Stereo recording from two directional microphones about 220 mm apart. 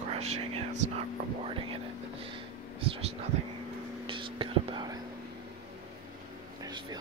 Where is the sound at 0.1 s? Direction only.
30° right (ahead or behind).